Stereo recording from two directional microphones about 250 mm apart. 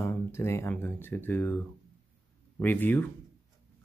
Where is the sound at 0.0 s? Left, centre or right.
Centre.